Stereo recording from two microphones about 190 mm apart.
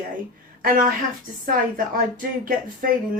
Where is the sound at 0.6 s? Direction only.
50° right (ahead or behind).